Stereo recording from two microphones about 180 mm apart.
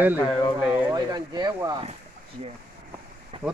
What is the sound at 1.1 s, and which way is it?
Speech, 20° right (ahead or behind).